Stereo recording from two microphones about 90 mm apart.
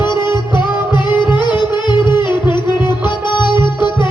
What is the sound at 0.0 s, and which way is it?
Music, 55° left (ahead or behind).